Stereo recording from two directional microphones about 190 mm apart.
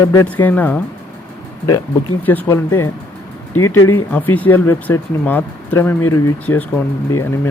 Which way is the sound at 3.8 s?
90° left.